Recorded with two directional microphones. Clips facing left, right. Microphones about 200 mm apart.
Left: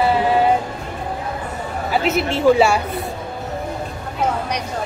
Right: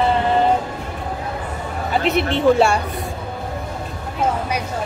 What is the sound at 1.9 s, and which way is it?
Speech, centre (ahead or behind).